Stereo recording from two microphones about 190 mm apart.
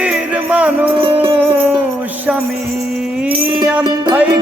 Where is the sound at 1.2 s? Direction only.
10° right (ahead or behind).